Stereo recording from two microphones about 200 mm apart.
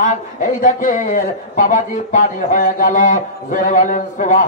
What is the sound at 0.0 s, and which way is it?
A man's voice, 40° left (ahead or behind).